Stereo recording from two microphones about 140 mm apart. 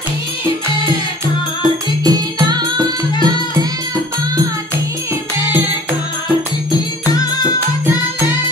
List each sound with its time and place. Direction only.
2.0 s music: 25° right (ahead or behind)
7.2 s music: 30° left (ahead or behind)